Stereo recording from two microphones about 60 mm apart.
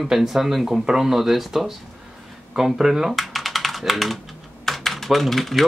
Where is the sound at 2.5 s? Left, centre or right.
Centre.